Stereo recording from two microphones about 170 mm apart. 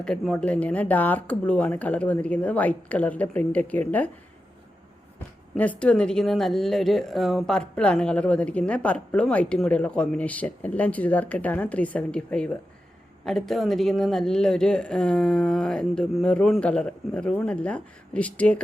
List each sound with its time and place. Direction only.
0.0 s speech: 5° left (ahead or behind)
5.5 s speech: 10° left (ahead or behind)